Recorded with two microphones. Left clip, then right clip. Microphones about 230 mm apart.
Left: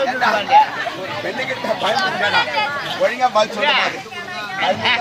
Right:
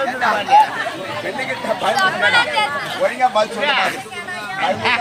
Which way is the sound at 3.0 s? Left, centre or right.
Centre.